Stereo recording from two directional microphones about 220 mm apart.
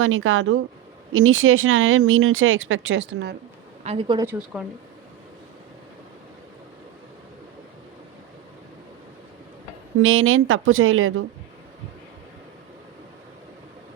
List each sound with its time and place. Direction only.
0.0 s speech: 65° right (ahead or behind)
3.8 s speech: 25° right (ahead or behind)
4.5 s speech: 5° right (ahead or behind)
10.0 s speech: 65° right (ahead or behind)